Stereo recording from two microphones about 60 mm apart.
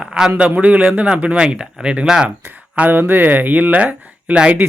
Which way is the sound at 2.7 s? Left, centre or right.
Right.